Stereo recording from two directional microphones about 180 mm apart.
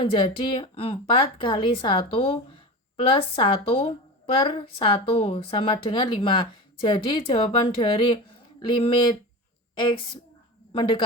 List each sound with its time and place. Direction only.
0.0 s a woman's voice: 25° left (ahead or behind)